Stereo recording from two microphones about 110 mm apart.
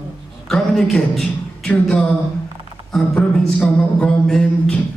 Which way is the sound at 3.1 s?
10° left (ahead or behind).